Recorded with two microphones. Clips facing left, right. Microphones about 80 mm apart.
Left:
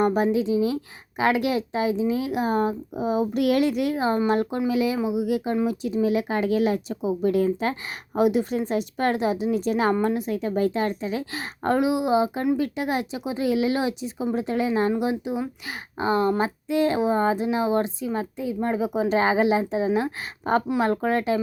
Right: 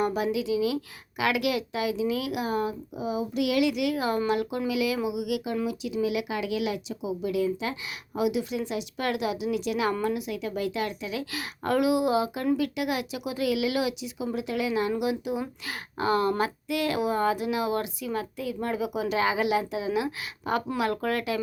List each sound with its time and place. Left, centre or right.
0.0 s speech: left